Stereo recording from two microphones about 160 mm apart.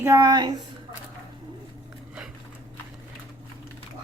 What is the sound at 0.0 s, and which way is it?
Speech, 20° right (ahead or behind).